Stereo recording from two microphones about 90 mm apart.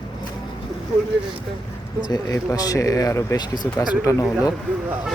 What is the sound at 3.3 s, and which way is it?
Speech, 50° left (ahead or behind).